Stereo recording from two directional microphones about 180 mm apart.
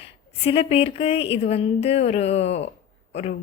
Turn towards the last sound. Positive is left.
turn(degrees=40)  # may be behind; listen again after turning